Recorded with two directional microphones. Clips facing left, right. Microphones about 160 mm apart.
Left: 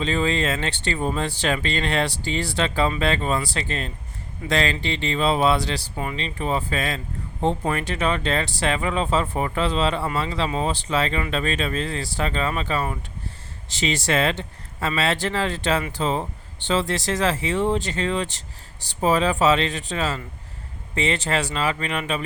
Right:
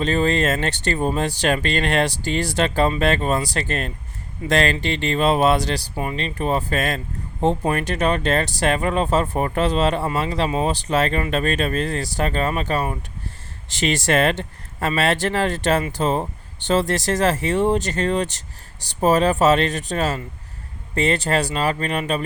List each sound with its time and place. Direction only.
0.0 s speech: 45° right (ahead or behind)
13.8 s speech: 50° right (ahead or behind)